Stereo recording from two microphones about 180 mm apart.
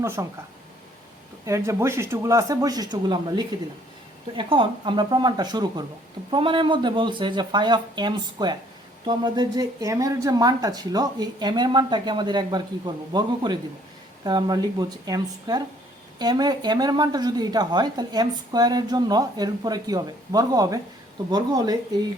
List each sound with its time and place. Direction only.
0.2 s speech: 15° right (ahead or behind)
1.5 s speech: 15° right (ahead or behind)